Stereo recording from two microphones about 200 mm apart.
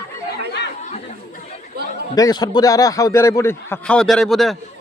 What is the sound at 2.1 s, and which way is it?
A man's voice, 20° left (ahead or behind).